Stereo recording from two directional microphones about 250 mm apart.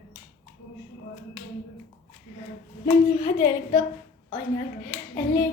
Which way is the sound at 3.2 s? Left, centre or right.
Left.